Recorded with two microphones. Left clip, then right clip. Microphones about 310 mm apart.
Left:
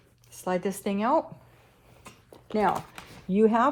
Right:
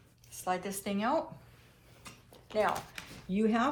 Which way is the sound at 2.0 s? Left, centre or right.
Left.